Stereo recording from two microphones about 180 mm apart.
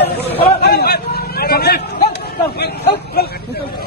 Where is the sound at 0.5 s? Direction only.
65° left (ahead or behind).